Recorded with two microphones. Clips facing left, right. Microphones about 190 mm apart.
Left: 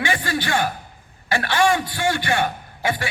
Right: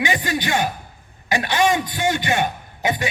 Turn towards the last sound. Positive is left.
turn(degrees=-20)  # may be behind; listen again after turning